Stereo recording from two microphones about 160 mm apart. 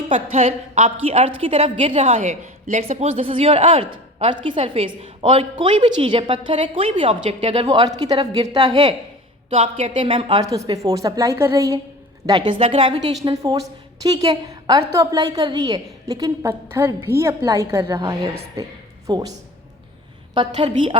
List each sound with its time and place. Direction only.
0.1 s a woman's voice: 45° right (ahead or behind); by 9.0 s 30° right (ahead or behind)
9.5 s a woman's voice: 45° right (ahead or behind)
9.9 s a woman's voice: 30° right (ahead or behind)
10.4 s a woman's voice: 20° right (ahead or behind)
13.2 s a woman's voice: 25° right (ahead or behind)
20.3 s a woman's voice: 30° right (ahead or behind)